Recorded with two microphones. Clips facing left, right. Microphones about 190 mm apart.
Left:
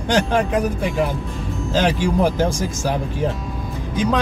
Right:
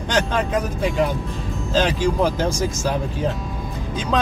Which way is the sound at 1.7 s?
15° left (ahead or behind).